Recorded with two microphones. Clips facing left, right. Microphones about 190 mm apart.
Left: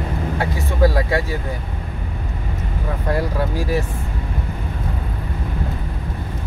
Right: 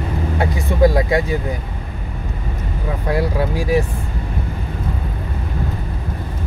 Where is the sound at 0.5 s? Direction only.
15° right (ahead or behind).